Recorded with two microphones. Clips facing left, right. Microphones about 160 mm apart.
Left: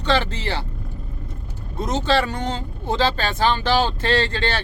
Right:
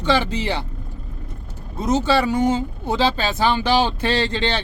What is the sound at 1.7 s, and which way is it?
Speech, centre (ahead or behind).